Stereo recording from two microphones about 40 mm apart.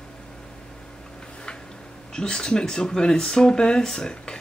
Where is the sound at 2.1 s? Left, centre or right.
Centre.